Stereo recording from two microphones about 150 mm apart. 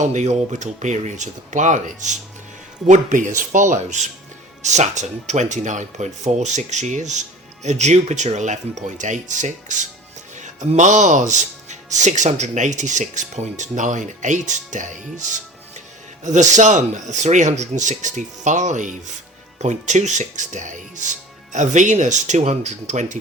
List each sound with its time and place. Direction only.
0.0 s speech: 50° right (ahead or behind)